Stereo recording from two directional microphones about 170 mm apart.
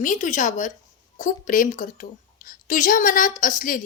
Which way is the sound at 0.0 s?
50° left (ahead or behind).